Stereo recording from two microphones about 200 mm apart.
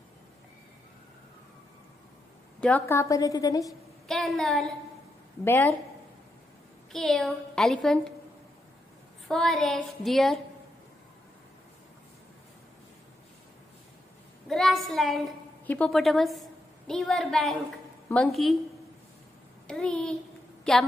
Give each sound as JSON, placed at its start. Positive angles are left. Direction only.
{"t": 2.6, "sound": "a woman's voice", "side_deg": 10}
{"t": 4.1, "sound": "a woman's voice", "side_deg": 0}
{"t": 6.9, "sound": "a woman's voice", "side_deg": 0}
{"t": 9.3, "sound": "a woman's voice", "side_deg": 0}
{"t": 14.5, "sound": "a woman's voice", "side_deg": 0}
{"t": 19.7, "sound": "a woman's voice", "side_deg": 5}